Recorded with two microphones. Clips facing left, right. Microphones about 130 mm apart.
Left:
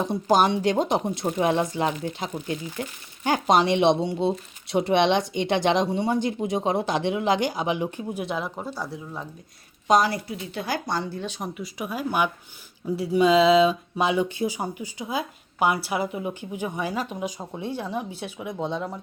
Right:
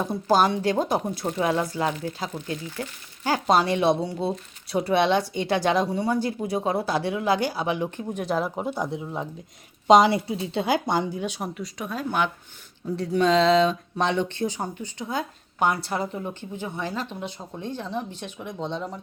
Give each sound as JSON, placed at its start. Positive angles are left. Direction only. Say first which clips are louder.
{"t": 0.0, "sound": "speech", "louder": "even", "side_deg": 20}
{"t": 8.5, "sound": "speech", "louder": "right 5 dB", "side_deg": -20}